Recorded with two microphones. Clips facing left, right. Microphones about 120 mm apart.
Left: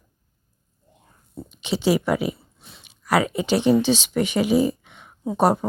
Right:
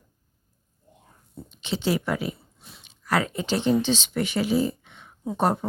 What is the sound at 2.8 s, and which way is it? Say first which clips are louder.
Speech: left 4 dB; 10° left (ahead or behind).